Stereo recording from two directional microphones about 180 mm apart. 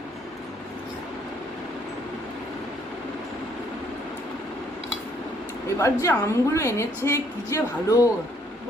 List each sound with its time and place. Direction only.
5.8 s a woman's voice: 15° left (ahead or behind)